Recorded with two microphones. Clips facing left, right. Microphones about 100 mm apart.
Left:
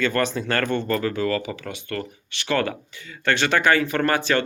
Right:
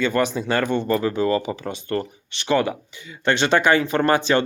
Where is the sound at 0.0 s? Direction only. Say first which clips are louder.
Right 2 dB; 15° right (ahead or behind).